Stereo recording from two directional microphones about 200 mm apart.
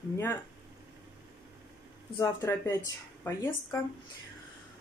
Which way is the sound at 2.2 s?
15° left (ahead or behind).